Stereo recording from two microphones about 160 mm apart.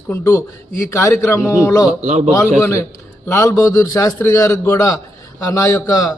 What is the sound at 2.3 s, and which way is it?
A man's voice, 15° left (ahead or behind).